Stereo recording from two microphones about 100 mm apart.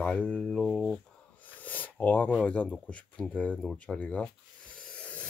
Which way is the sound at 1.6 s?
15° left (ahead or behind).